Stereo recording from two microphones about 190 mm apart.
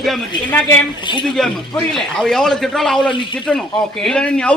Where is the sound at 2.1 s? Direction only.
Centre (ahead or behind).